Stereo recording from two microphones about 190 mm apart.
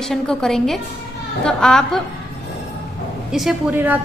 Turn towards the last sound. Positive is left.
turn(degrees=-10)  # may be behind; listen again after turning